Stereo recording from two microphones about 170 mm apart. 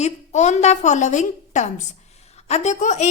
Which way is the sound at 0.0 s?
40° left (ahead or behind).